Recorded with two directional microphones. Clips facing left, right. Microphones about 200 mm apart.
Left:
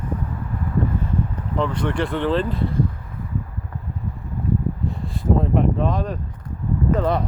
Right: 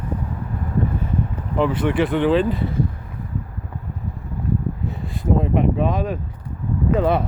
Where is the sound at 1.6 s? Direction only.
5° right (ahead or behind).